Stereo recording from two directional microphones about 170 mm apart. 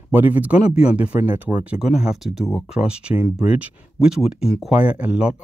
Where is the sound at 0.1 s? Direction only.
10° right (ahead or behind).